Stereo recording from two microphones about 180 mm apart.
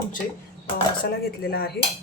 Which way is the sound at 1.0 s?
60° left (ahead or behind).